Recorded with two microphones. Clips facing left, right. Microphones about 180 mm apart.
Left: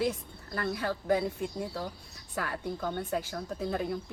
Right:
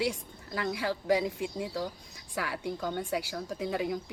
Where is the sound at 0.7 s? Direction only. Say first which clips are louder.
Right 1 dB; 90° right.